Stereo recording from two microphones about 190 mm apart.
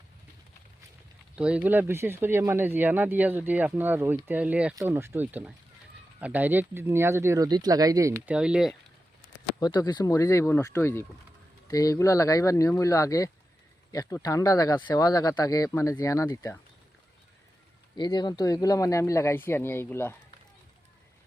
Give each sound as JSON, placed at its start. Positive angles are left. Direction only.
{"t": 1.4, "sound": "speech", "side_deg": -5}
{"t": 8.4, "sound": "speech", "side_deg": -5}
{"t": 9.6, "sound": "speech", "side_deg": 20}
{"t": 17.9, "sound": "speech", "side_deg": 25}